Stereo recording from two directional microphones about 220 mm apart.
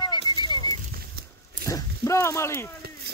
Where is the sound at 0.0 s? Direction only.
20° left (ahead or behind).